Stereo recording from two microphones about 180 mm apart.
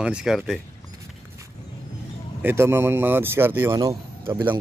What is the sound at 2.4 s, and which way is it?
Speech, 15° right (ahead or behind).